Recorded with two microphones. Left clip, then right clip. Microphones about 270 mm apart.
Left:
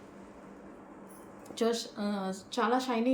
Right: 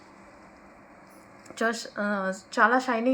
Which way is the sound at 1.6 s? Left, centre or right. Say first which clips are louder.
Right 3 dB; centre.